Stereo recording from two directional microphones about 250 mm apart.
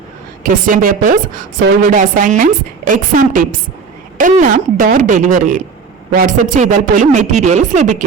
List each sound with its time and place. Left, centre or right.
0.4 s a woman's voice: right